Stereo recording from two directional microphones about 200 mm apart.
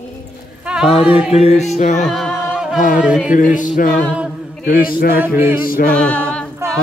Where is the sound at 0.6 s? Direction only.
5° right (ahead or behind).